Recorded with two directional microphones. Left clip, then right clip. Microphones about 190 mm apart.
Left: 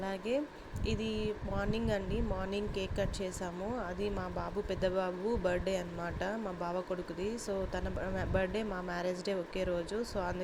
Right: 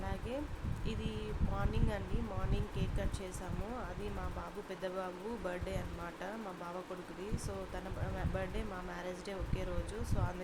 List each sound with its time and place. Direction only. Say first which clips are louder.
0.0 s a sound: left 7 dB; 25° left (ahead or behind)
0.9 s speech: left 8 dB; 25° left (ahead or behind)
4.7 s speech: left 7 dB; 25° left (ahead or behind)
8.4 s speech: left 9 dB; 25° left (ahead or behind)